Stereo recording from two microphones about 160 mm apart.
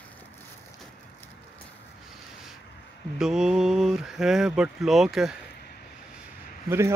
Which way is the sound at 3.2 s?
5° right (ahead or behind).